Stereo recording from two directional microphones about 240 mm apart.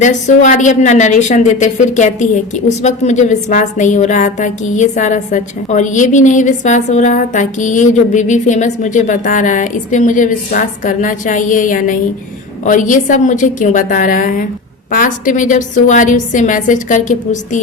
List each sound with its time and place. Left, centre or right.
0.0 s a woman's voice: left